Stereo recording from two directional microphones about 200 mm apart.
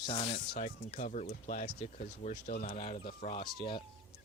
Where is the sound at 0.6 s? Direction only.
35° left (ahead or behind).